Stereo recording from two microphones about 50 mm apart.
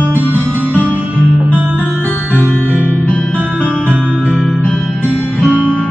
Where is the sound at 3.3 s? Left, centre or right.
Right.